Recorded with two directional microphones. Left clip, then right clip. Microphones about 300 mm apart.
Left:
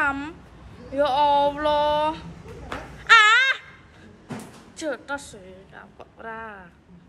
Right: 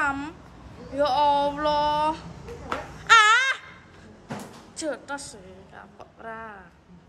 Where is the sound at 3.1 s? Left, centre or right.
Centre.